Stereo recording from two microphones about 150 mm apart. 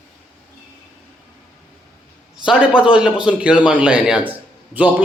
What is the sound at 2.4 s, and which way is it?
A man's voice, 5° right (ahead or behind).